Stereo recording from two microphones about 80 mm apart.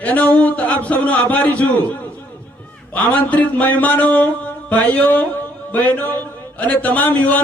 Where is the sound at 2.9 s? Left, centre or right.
Left.